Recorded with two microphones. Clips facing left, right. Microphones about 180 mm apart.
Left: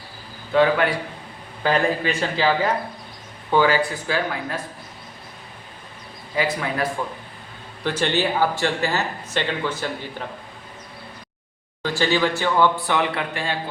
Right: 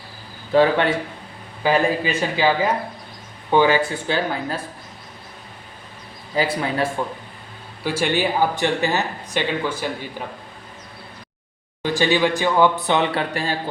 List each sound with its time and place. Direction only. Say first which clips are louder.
0.5 s speech: right 2 dB; 30° right (ahead or behind)
1.6 s speech: right 2 dB; 10° right (ahead or behind)
3.5 s speech: right 2 dB; 20° right (ahead or behind)
6.3 s a man's voice: right 2 dB; 30° right (ahead or behind)
7.9 s speech: right 1 dB; 10° right (ahead or behind)
11.8 s speech: right 2 dB; 15° right (ahead or behind); by 13.6 s 40° right (ahead or behind)